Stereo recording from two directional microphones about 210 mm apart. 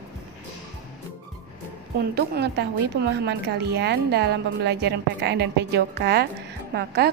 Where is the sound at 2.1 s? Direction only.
55° right (ahead or behind).